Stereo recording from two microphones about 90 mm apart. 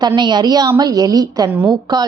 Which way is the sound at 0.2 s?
55° right (ahead or behind).